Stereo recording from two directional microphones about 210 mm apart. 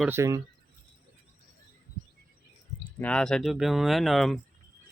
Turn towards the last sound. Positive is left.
turn(degrees=0)  # may be behind; listen again after turning